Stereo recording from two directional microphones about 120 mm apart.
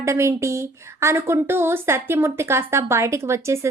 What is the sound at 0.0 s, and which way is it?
Speech, 25° right (ahead or behind).